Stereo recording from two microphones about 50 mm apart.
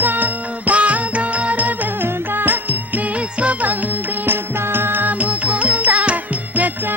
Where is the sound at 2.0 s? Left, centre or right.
Right.